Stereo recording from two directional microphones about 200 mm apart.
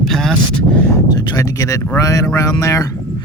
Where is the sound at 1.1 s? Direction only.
20° left (ahead or behind).